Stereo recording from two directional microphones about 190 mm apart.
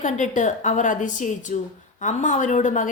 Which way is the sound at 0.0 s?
40° left (ahead or behind).